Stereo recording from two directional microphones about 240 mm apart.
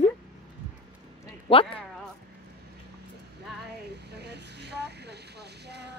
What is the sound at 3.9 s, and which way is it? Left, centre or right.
Vehicle, right.